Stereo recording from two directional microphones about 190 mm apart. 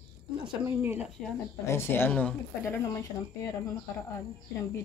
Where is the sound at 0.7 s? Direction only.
10° right (ahead or behind).